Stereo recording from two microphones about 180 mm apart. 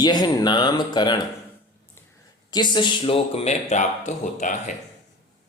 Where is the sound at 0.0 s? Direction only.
25° left (ahead or behind).